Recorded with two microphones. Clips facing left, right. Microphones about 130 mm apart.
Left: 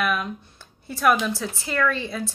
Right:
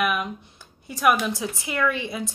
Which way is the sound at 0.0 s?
10° right (ahead or behind).